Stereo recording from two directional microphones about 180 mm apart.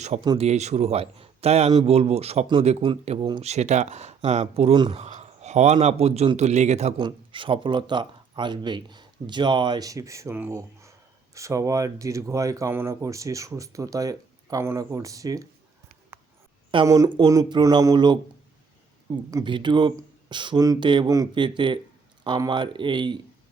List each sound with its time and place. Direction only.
0.3 s a man's voice: 35° right (ahead or behind)
4.7 s a man's voice: 25° right (ahead or behind)
16.7 s speech: 20° right (ahead or behind)